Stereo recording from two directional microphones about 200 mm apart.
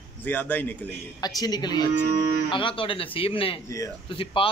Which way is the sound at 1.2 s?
20° left (ahead or behind).